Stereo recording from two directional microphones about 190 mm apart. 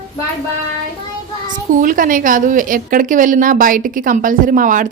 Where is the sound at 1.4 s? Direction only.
45° right (ahead or behind).